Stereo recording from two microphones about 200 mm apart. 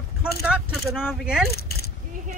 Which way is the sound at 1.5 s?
50° left (ahead or behind).